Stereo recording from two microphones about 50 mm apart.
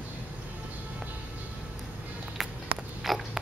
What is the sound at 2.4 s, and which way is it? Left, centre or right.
Walk, centre.